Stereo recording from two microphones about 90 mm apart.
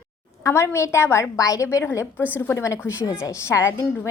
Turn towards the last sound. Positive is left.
turn(degrees=30)  # may be behind; listen again after turning